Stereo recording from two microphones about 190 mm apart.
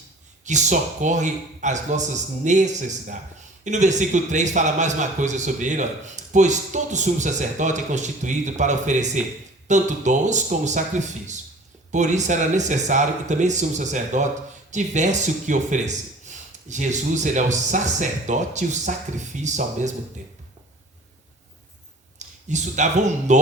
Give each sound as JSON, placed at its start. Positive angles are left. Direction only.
{"t": 0.4, "sound": "a man's voice", "side_deg": -40}
{"t": 22.4, "sound": "a man's voice", "side_deg": -40}